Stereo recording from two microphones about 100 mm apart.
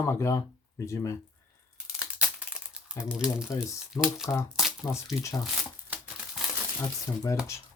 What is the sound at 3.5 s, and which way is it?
Speech, 35° left (ahead or behind).